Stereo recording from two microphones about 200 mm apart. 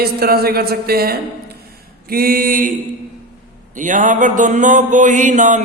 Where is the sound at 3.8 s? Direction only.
40° right (ahead or behind).